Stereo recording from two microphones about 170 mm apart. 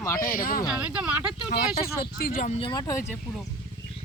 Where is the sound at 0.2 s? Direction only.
55° left (ahead or behind).